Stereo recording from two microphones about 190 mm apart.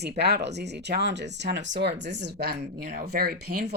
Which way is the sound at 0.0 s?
60° right (ahead or behind).